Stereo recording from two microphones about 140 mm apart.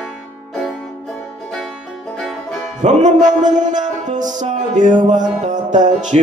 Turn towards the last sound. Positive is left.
turn(degrees=-60)  # may be behind; listen again after turning